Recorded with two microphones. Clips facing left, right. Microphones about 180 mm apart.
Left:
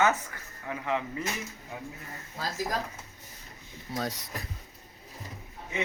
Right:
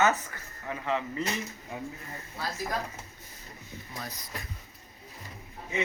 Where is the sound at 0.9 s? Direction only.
15° left (ahead or behind).